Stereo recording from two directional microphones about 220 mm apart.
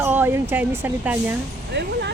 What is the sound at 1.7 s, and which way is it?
Speech, 50° right (ahead or behind).